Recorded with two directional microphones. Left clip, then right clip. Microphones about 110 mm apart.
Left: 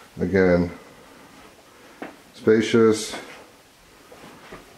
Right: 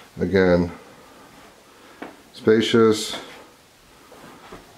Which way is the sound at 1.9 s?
20° right (ahead or behind).